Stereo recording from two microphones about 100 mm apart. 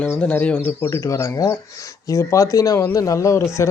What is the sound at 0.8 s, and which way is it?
Speech, 30° left (ahead or behind).